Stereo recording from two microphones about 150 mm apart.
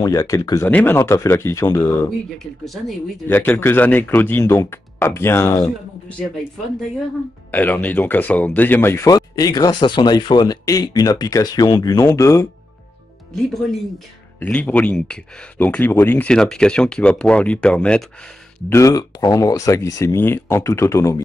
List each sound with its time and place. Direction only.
0.0 s speech: 20° left (ahead or behind)
2.3 s speech: centre (ahead or behind)
3.3 s speech: 15° left (ahead or behind)
7.5 s speech: 10° left (ahead or behind)
14.4 s speech: 10° left (ahead or behind)
18.7 s speech: 20° left (ahead or behind)